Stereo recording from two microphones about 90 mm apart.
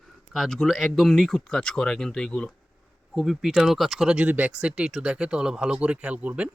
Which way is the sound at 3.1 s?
5° right (ahead or behind).